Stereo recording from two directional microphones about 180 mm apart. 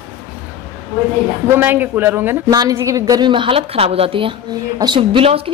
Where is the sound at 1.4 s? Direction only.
10° right (ahead or behind).